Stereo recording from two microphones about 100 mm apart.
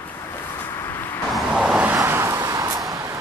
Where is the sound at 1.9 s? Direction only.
30° right (ahead or behind).